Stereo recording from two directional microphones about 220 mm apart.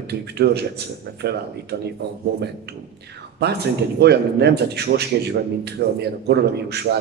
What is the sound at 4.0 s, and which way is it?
Speech, 50° right (ahead or behind).